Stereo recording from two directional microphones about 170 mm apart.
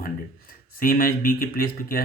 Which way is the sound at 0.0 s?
60° left (ahead or behind).